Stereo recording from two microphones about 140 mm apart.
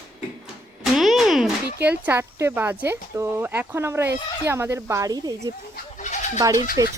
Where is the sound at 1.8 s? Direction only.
15° right (ahead or behind).